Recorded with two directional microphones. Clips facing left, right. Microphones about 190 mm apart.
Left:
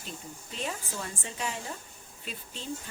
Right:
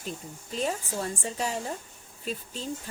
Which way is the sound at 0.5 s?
40° right (ahead or behind).